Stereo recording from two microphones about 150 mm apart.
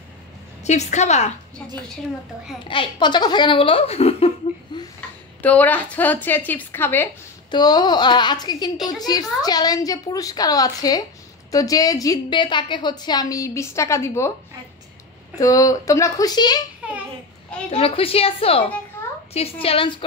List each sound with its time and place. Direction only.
0.7 s a woman's voice: 50° left (ahead or behind)
2.7 s speech: 30° left (ahead or behind)
4.7 s a sound: 30° left (ahead or behind)
5.4 s a woman's voice: 10° left (ahead or behind)
7.5 s a woman's voice: 30° left (ahead or behind)
15.3 s a woman's voice: 20° left (ahead or behind)
17.6 s speech: 40° left (ahead or behind)